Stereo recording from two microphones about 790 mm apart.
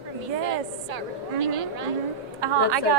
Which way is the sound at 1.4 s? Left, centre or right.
Right.